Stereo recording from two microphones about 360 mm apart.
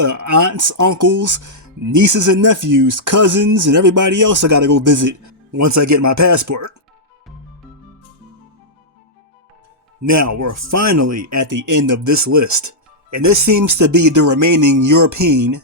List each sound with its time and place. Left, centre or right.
0.0 s speech: right
10.0 s speech: right